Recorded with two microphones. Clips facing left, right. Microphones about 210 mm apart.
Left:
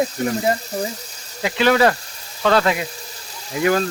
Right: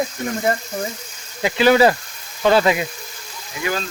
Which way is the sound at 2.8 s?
35° left (ahead or behind).